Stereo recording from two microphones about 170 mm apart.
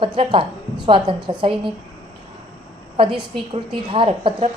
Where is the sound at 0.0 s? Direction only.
30° right (ahead or behind).